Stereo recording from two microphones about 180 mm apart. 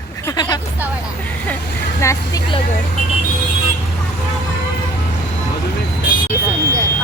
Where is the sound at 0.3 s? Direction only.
25° left (ahead or behind).